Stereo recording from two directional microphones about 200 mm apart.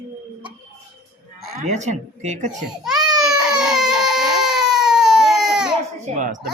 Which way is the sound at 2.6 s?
5° right (ahead or behind).